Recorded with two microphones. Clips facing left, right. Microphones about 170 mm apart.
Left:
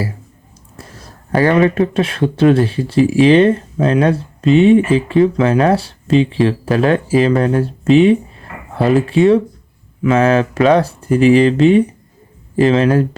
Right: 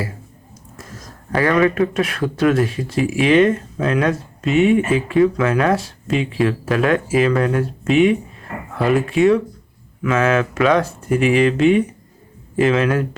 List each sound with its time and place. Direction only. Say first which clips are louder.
0.8 s speech: left 1 dB; 30° left (ahead or behind)